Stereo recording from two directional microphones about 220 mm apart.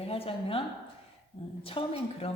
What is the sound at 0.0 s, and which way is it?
Speech, 25° left (ahead or behind).